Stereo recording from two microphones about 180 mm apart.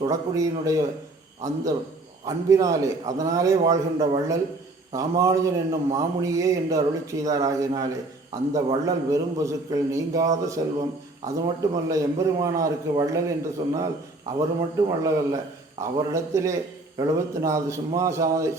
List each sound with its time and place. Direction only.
0.0 s a man's voice: 20° right (ahead or behind)